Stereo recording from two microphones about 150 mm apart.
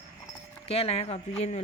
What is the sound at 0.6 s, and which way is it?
Speech, 40° left (ahead or behind).